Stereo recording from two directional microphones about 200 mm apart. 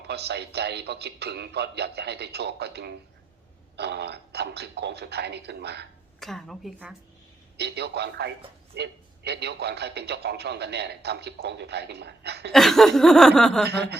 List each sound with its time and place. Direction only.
0.1 s a man's voice: 55° right (ahead or behind)
6.1 s chuckle: centre (ahead or behind)
7.5 s a man's voice: 55° right (ahead or behind)
12.5 s chuckle: centre (ahead or behind)